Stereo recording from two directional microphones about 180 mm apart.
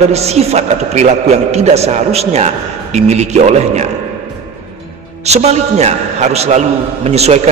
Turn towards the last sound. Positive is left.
turn(degrees=-35)  # may be behind; listen again after turning